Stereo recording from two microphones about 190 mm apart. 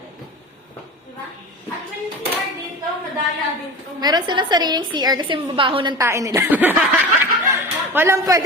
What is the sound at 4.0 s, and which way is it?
A woman's voice, 20° right (ahead or behind).